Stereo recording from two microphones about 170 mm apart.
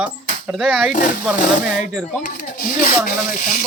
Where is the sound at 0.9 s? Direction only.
50° left (ahead or behind).